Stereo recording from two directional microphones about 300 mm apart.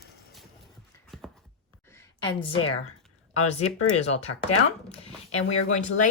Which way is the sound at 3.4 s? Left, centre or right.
Left.